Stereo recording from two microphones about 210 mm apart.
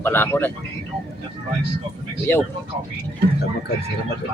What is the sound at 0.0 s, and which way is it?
Speech, 10° left (ahead or behind).